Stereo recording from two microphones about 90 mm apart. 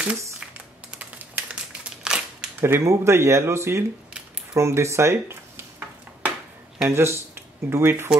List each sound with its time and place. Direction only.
0.9 s typewriter: 15° right (ahead or behind)
2.6 s speech: 30° right (ahead or behind)
4.6 s dishes: 30° right (ahead or behind)
6.9 s speech: 30° right (ahead or behind)